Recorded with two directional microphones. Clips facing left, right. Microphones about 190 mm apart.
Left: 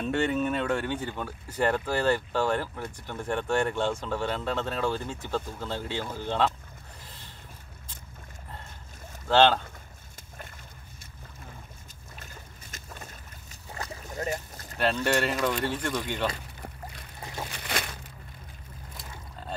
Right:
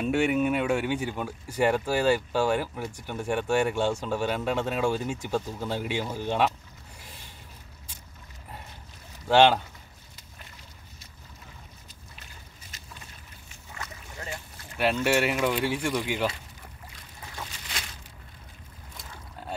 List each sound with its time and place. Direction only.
0.0 s speech: 10° right (ahead or behind)
7.0 s a sound: 10° right (ahead or behind)
9.3 s speech: 10° right (ahead or behind)
12.7 s boat: 45° left (ahead or behind)
15.0 s speech: 10° right (ahead or behind)
17.5 s crumpling: 60° left (ahead or behind)